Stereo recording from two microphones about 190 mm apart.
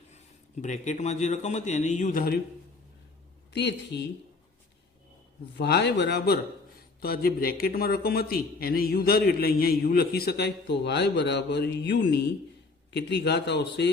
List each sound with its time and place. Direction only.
0.1 s a man's voice: 40° left (ahead or behind)
3.5 s speech: 60° left (ahead or behind)
5.5 s a man's voice: 60° left (ahead or behind)